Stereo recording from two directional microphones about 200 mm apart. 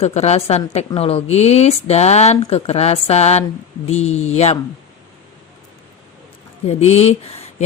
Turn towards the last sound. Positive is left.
turn(degrees=30)  # may be behind; listen again after turning